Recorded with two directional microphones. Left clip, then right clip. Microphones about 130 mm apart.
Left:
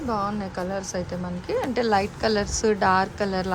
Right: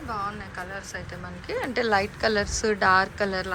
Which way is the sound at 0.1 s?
50° left (ahead or behind).